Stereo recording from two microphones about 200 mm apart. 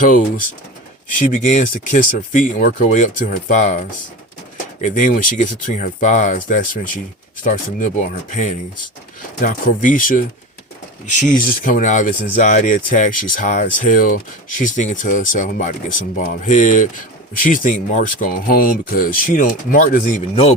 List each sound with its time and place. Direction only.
0.0 s speech: 40° left (ahead or behind)
20.3 s a man's voice: 30° left (ahead or behind)